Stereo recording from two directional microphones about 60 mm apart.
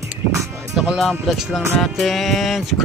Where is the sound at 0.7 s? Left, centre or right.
Centre.